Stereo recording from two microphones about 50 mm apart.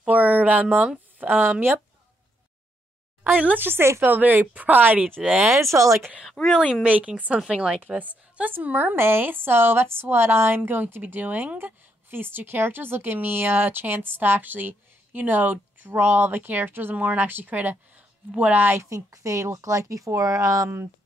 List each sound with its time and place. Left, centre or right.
0.1 s a sound: right
1.2 s a woman's voice: right
3.5 s a woman's voice: right
5.5 s speech: right
6.5 s speech: centre
6.8 s speech: right
7.3 s speech: centre
7.8 s a woman's voice: right
8.9 s a woman's voice: right
16.9 s speech: right
17.2 s speech: right
18.8 s speech: right